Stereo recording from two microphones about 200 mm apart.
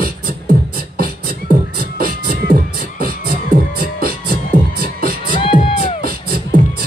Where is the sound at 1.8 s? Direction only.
45° right (ahead or behind).